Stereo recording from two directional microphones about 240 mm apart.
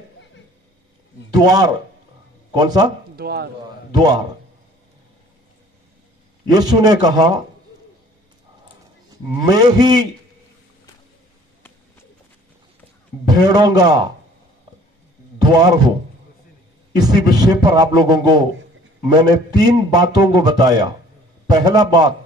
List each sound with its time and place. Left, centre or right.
1.4 s a man's voice: centre
3.2 s speech: right
3.9 s a man's voice: centre
6.5 s a man's voice: centre
9.5 s a man's voice: centre
13.3 s a man's voice: centre
15.4 s a man's voice: centre
16.9 s a man's voice: centre